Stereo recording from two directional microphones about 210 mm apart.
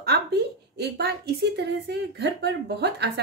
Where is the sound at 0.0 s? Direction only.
50° right (ahead or behind).